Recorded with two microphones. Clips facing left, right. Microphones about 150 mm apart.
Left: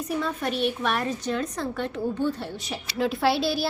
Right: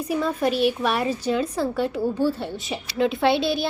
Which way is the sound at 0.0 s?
10° right (ahead or behind).